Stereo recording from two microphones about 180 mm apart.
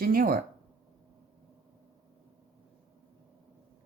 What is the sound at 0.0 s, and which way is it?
Speech, 55° right (ahead or behind).